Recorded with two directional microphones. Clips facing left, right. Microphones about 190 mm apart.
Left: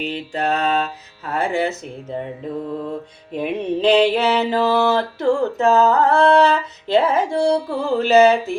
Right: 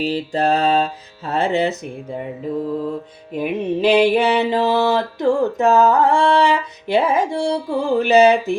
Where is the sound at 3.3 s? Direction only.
10° right (ahead or behind).